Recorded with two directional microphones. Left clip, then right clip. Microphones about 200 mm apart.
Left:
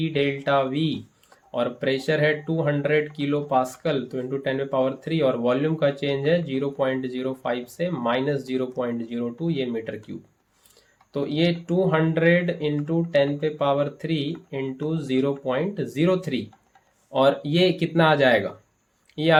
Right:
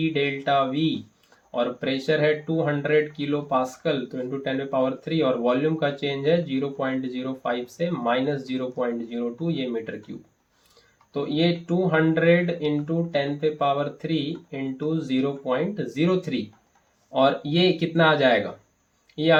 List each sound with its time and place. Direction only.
0.0 s speech: 40° left (ahead or behind)
11.1 s speech: 45° left (ahead or behind)